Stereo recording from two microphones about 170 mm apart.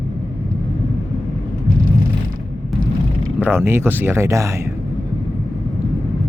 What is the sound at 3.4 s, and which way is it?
Speech, 15° right (ahead or behind).